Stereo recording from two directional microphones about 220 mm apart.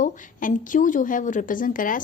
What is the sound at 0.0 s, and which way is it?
A woman's voice, 35° left (ahead or behind).